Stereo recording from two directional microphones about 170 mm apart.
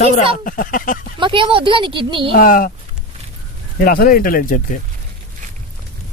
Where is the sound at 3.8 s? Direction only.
60° left (ahead or behind).